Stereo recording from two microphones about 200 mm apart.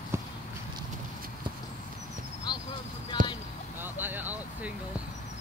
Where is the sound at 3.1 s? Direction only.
20° left (ahead or behind).